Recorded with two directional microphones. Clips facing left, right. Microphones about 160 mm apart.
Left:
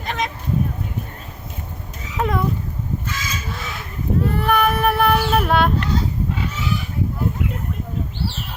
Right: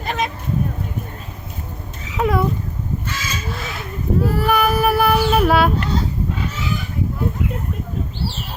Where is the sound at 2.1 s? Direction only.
5° right (ahead or behind).